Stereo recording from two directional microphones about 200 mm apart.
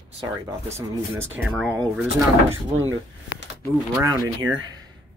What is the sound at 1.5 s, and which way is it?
Speech, 5° left (ahead or behind).